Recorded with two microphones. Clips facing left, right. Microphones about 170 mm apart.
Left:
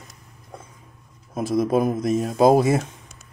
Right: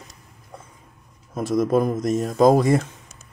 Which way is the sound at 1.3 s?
Centre (ahead or behind).